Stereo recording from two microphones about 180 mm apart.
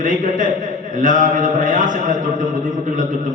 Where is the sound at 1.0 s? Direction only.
45° right (ahead or behind).